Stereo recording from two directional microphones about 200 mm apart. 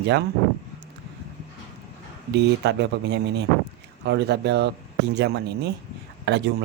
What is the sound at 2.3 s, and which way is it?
A man's voice, 60° right (ahead or behind).